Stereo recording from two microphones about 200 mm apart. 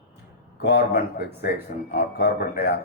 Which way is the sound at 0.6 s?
55° left (ahead or behind).